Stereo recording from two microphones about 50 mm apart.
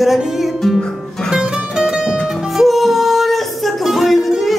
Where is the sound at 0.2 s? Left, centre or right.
Centre.